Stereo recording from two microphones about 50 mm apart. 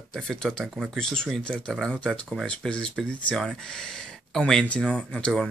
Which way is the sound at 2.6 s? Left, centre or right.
Centre.